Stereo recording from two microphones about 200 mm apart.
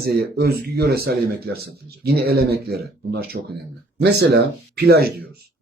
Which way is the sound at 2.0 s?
55° right (ahead or behind).